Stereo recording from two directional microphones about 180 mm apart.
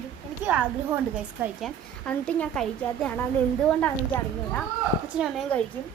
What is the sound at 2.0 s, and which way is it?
A woman's voice, 5° left (ahead or behind).